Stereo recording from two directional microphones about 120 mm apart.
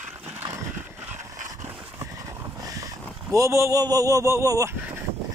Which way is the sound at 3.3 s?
25° right (ahead or behind).